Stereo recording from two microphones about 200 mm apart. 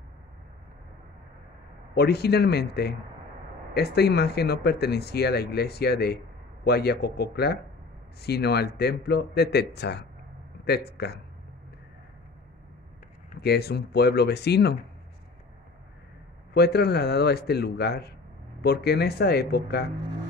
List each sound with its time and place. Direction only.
2.0 s speech: 55° left (ahead or behind)
13.4 s speech: 55° left (ahead or behind)
16.5 s speech: 55° left (ahead or behind)